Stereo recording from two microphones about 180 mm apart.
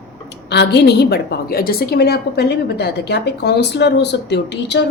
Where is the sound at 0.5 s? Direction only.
70° left (ahead or behind).